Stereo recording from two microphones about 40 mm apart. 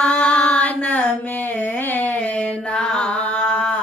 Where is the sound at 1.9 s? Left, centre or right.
Left.